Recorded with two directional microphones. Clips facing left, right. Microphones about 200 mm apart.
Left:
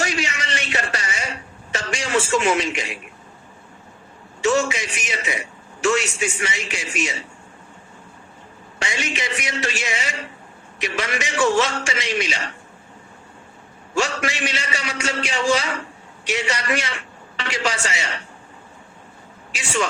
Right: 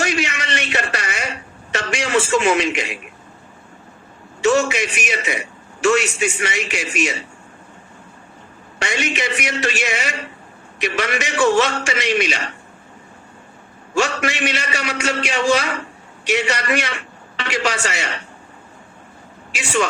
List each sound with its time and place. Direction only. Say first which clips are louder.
0.0 s a sound: right 3 dB; 65° right (ahead or behind)
1.7 s a man's voice: right 3 dB; 65° right (ahead or behind)
4.4 s a man's voice: right 3 dB; 65° right (ahead or behind)
8.8 s a man's voice: right 4 dB; 65° right (ahead or behind)
13.9 s a man's voice: right 3 dB; 65° right (ahead or behind)